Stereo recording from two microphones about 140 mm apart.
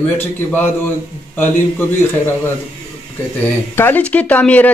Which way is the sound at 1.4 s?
15° left (ahead or behind).